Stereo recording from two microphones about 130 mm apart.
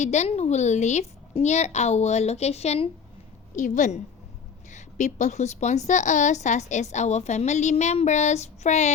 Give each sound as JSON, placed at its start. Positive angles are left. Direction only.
{"t": 0.0, "sound": "a woman's voice", "side_deg": 60}
{"t": 3.5, "sound": "a woman's voice", "side_deg": 70}